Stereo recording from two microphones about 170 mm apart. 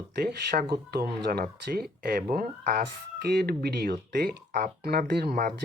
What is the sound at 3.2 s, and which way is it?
Speech, 65° right (ahead or behind).